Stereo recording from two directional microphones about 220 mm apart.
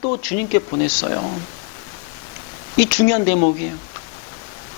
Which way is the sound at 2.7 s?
10° left (ahead or behind).